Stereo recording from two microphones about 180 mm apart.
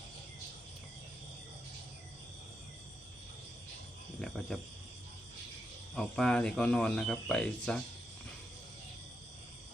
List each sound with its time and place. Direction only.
4.2 s speech: centre (ahead or behind)
5.9 s speech: 5° left (ahead or behind)